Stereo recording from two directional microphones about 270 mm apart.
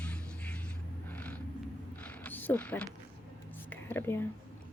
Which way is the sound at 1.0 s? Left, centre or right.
Centre.